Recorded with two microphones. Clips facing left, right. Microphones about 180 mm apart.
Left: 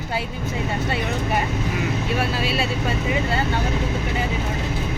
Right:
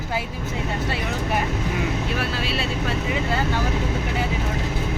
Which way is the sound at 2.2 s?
Centre (ahead or behind).